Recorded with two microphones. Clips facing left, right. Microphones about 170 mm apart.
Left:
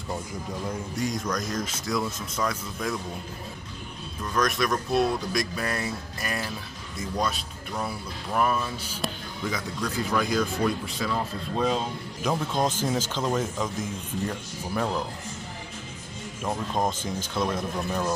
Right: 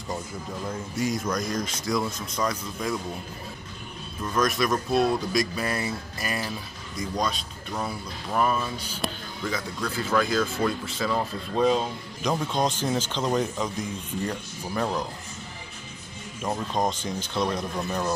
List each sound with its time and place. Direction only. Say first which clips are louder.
0.9 s speech: right 3 dB; 5° right (ahead or behind)
4.4 s speech: right 1 dB; centre (ahead or behind)
8.3 s speech: even; centre (ahead or behind)
9.8 s speech: right 2 dB; 15° left (ahead or behind)
11.0 s speech: right 3 dB; centre (ahead or behind)
16.4 s speech: right 1 dB; 5° left (ahead or behind)